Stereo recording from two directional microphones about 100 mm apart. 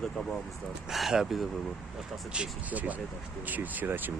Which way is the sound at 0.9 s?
5° right (ahead or behind).